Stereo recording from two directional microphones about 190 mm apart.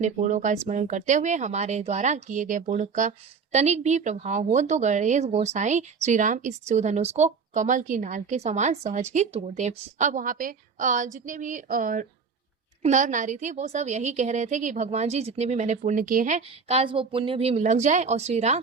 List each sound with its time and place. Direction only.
0.0 s speech: 40° right (ahead or behind)